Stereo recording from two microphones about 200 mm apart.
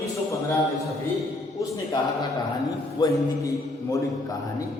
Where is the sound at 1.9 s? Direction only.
20° left (ahead or behind).